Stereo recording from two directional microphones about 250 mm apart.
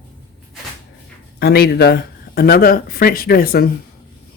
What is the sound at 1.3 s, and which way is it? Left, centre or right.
Speech, left.